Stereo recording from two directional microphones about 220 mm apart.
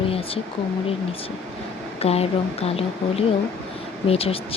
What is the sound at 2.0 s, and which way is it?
A woman's voice, 25° left (ahead or behind).